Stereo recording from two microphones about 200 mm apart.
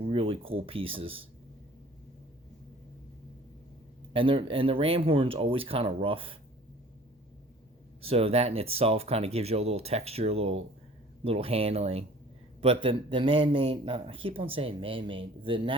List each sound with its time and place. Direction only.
0.0 s speech: 30° right (ahead or behind)
4.1 s a man's voice: 25° right (ahead or behind)
8.0 s a man's voice: 30° right (ahead or behind)